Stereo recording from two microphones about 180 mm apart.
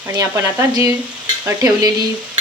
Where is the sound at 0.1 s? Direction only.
15° right (ahead or behind).